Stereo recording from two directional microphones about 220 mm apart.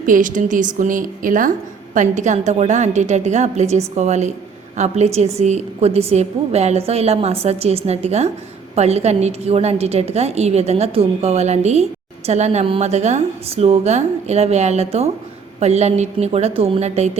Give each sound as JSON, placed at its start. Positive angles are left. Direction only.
{"t": 0.0, "sound": "a woman's voice", "side_deg": -35}